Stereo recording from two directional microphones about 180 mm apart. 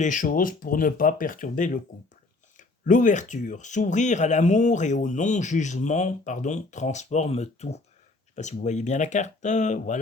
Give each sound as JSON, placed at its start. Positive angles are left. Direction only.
{"t": 0.0, "sound": "speech", "side_deg": 45}